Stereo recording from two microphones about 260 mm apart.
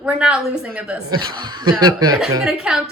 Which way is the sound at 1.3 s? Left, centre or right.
Centre.